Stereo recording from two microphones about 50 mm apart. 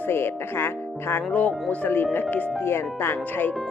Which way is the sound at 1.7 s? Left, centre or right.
Left.